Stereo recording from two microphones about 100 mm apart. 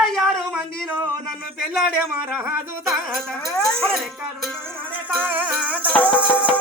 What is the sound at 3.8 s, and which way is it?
Speech, 5° left (ahead or behind).